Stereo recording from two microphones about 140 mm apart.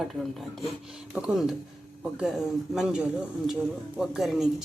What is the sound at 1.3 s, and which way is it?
Speech, 5° right (ahead or behind).